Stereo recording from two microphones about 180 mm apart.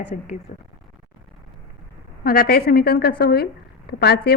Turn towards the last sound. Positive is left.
turn(degrees=60)  # may be behind; listen again after turning